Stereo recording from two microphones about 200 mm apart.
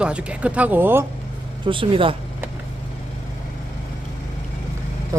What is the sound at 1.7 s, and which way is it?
Speech, 25° right (ahead or behind).